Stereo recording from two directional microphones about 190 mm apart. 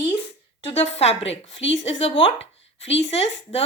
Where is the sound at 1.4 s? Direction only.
75° left (ahead or behind).